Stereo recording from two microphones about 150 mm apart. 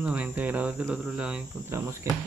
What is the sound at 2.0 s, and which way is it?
Speech, 20° right (ahead or behind).